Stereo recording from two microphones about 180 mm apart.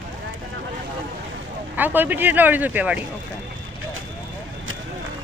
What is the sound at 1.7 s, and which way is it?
Speech, 10° right (ahead or behind).